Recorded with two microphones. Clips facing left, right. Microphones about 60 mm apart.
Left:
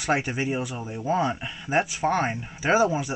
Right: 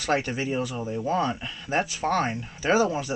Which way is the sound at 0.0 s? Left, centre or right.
Centre.